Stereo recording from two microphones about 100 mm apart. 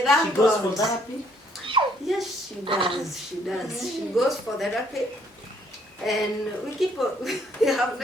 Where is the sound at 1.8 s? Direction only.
55° right (ahead or behind).